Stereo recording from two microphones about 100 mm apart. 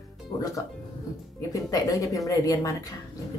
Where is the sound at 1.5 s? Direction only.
35° left (ahead or behind).